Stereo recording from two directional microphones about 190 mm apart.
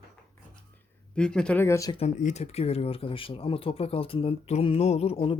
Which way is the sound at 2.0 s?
40° left (ahead or behind).